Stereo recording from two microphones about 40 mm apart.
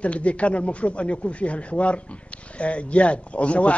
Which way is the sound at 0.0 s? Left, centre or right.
Left.